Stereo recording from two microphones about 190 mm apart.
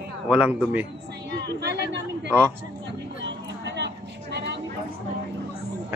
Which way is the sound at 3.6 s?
65° right (ahead or behind).